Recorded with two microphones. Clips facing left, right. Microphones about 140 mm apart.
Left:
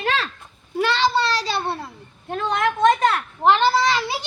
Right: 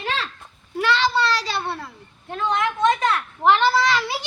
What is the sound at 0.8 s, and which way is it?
A child's voice, 25° left (ahead or behind).